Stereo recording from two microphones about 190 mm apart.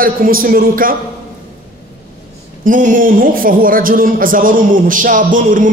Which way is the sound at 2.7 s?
45° right (ahead or behind).